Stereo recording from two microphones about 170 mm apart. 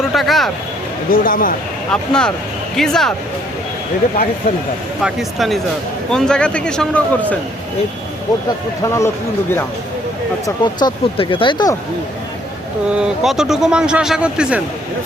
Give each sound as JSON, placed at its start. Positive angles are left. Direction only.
{"t": 0.0, "sound": "a sound", "side_deg": 0}
{"t": 1.1, "sound": "speech", "side_deg": 55}
{"t": 1.9, "sound": "speech", "side_deg": 5}
{"t": 4.4, "sound": "speech", "side_deg": 50}
{"t": 5.0, "sound": "speech", "side_deg": 0}
{"t": 8.8, "sound": "speech", "side_deg": 15}
{"t": 10.4, "sound": "speech", "side_deg": 25}
{"t": 12.9, "sound": "speech", "side_deg": -5}